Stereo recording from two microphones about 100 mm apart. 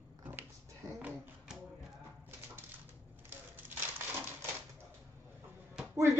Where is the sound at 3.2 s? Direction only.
20° right (ahead or behind).